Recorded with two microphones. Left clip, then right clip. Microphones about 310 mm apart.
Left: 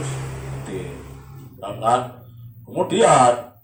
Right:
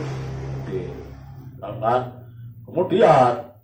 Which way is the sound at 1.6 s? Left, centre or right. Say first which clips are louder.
Left 2 dB; centre.